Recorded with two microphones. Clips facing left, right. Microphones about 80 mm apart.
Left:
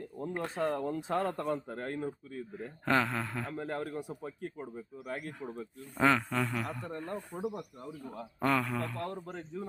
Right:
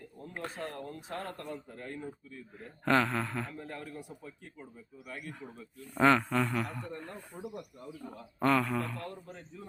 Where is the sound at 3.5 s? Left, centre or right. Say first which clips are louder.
Left 6 dB; left.